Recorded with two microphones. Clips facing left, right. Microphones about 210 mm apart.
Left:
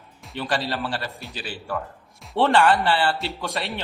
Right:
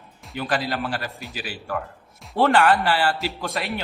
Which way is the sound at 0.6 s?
30° left (ahead or behind).